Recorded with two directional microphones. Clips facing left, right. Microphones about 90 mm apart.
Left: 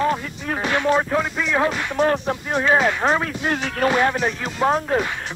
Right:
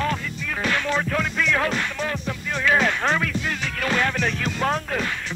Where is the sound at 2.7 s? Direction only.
10° left (ahead or behind).